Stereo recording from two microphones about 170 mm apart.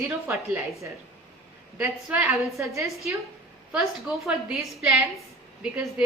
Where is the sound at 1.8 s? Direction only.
5° right (ahead or behind).